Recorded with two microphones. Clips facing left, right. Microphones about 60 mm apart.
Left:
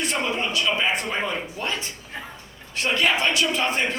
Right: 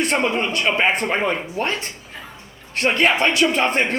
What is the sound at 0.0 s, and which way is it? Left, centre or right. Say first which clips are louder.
A man's voice: right 5 dB; right.